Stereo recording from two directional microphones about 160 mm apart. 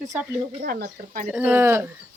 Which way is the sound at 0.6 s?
65° right (ahead or behind).